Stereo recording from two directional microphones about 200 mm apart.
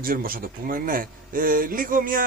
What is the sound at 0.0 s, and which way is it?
Speech, 45° right (ahead or behind).